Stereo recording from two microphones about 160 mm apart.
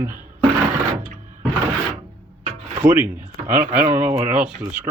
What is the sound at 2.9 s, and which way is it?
Speech, 10° right (ahead or behind).